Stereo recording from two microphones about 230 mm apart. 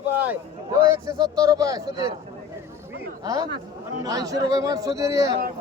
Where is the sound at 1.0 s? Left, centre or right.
Centre.